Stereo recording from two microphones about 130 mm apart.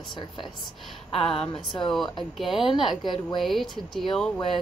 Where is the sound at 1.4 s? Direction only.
40° left (ahead or behind).